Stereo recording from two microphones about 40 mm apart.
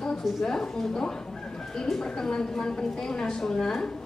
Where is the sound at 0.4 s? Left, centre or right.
Centre.